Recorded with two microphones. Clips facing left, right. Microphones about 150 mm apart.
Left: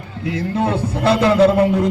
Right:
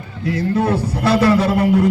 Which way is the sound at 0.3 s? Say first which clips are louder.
Right 2 dB; 20° left (ahead or behind).